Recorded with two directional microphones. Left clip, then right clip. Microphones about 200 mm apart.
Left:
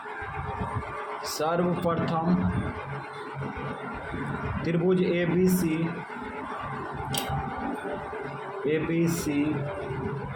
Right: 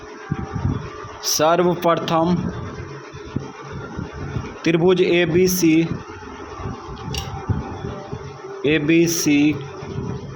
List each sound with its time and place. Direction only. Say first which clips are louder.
1.3 s speech: right 11 dB; 35° right (ahead or behind)
4.6 s speech: right 10 dB; 35° right (ahead or behind)
8.6 s speech: right 10 dB; 35° right (ahead or behind)